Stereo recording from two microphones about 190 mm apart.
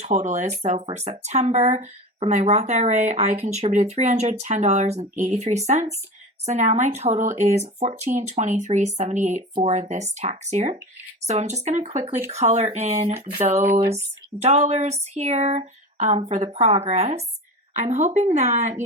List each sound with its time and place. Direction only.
0.0 s speech: 40° right (ahead or behind)